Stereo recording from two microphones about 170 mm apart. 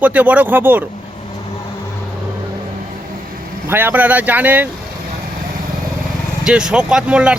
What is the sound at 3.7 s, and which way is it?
Speech, 10° right (ahead or behind).